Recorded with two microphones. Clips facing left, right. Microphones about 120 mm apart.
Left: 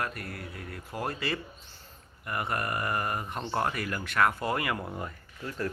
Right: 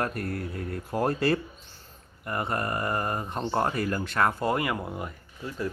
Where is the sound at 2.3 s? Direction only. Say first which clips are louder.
Right 2 dB; 30° right (ahead or behind).